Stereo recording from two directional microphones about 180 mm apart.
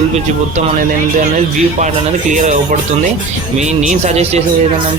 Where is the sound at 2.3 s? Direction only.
40° right (ahead or behind).